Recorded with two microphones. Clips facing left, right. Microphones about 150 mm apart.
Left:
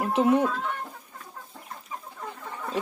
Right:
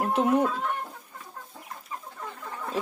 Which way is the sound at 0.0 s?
Centre (ahead or behind).